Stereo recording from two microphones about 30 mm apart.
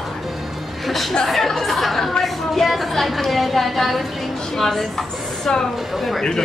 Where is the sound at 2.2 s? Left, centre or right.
Centre.